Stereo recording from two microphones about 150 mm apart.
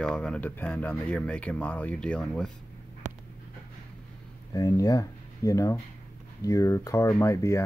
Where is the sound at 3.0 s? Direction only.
55° right (ahead or behind).